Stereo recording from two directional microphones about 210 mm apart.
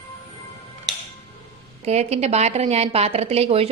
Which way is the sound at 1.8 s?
30° right (ahead or behind).